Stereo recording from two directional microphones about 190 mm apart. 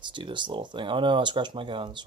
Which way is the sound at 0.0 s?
25° right (ahead or behind).